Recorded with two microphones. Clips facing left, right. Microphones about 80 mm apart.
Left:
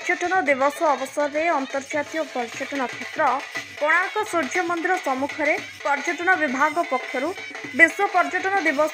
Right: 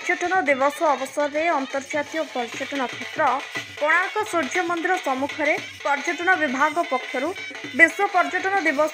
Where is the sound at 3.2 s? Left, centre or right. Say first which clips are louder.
Even; centre.